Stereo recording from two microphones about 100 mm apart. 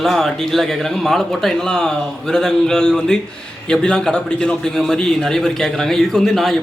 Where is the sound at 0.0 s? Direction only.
5° left (ahead or behind).